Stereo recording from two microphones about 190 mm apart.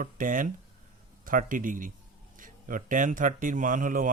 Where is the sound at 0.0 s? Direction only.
45° right (ahead or behind).